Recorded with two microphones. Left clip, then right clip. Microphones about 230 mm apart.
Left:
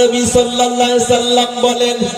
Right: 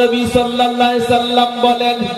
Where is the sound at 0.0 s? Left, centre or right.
Left.